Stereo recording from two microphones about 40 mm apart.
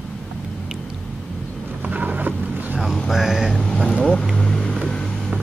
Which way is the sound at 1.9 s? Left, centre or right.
Right.